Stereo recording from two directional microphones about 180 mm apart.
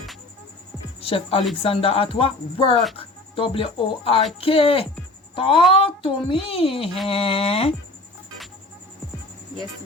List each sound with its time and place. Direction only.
1.0 s a woman's voice: 30° left (ahead or behind)